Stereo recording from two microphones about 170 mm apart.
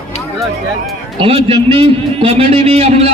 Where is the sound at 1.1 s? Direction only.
30° right (ahead or behind).